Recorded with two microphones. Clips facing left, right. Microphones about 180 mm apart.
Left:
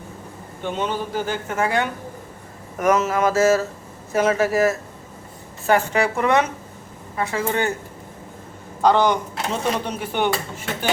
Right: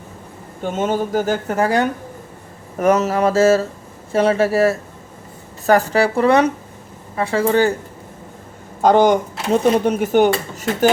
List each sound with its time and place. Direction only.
0.6 s a woman's voice: 45° right (ahead or behind)
8.8 s speech: 45° right (ahead or behind)